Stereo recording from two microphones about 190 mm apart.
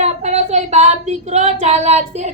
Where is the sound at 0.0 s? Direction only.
35° right (ahead or behind).